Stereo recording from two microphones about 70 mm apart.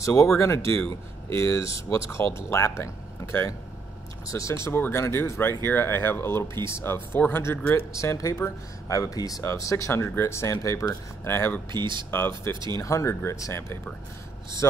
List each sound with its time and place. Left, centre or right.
0.0 s speech: left
4.7 s speech: left
7.7 s speech: left
9.4 s speech: left
11.2 s speech: left
11.7 s speech: right
12.7 s speech: left
14.6 s speech: left